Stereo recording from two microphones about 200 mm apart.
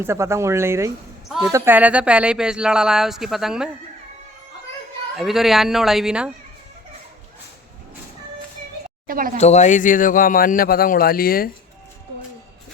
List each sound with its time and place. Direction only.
0.0 s speech: 15° right (ahead or behind)
1.3 s a sound: centre (ahead or behind)
1.5 s speech: 10° right (ahead or behind)
5.1 s speech: centre (ahead or behind)
9.0 s speech: 45° right (ahead or behind)
9.4 s a man's voice: 35° left (ahead or behind)